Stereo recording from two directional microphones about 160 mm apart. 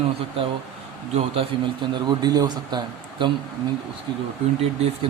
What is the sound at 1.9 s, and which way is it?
Speech, 25° right (ahead or behind).